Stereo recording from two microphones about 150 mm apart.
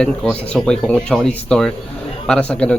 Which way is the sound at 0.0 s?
5° left (ahead or behind).